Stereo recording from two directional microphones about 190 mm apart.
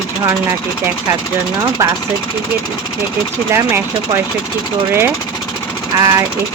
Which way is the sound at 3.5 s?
15° right (ahead or behind).